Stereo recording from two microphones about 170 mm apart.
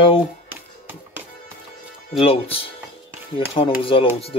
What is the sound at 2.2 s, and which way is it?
Speech, 35° left (ahead or behind).